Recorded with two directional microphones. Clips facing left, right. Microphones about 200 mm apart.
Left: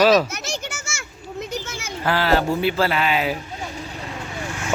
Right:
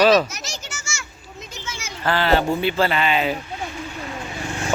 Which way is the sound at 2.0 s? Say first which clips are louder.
Right 1 dB; 5° left (ahead or behind).